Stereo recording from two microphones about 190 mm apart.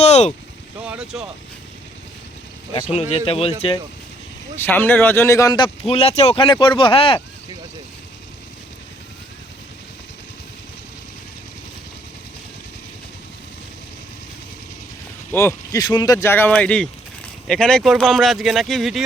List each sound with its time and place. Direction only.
0.0 s vehicle: 35° left (ahead or behind)
0.8 s speech: 5° right (ahead or behind)
2.9 s speech: 35° left (ahead or behind)
4.5 s speech: 10° left (ahead or behind); by 7.2 s 30° left (ahead or behind)
15.3 s speech: 15° left (ahead or behind)